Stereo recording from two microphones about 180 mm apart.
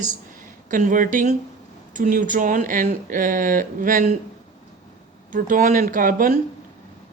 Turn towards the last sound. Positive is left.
turn(degrees=-50)  # may be behind; listen again after turning